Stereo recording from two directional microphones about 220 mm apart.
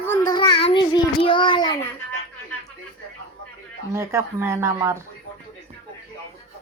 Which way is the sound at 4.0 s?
10° right (ahead or behind).